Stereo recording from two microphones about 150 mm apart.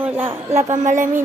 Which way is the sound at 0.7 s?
55° right (ahead or behind).